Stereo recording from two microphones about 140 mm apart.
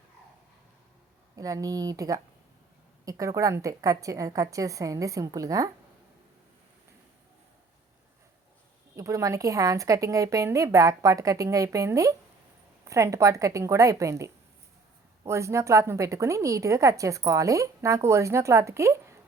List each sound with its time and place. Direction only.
1.4 s a woman's voice: 25° right (ahead or behind)
9.0 s a woman's voice: 20° right (ahead or behind)